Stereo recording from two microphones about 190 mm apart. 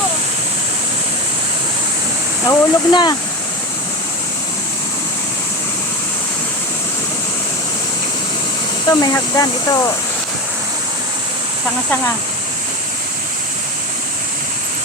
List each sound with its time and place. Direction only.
2.5 s speech: 20° left (ahead or behind)
8.9 s speech: 20° left (ahead or behind)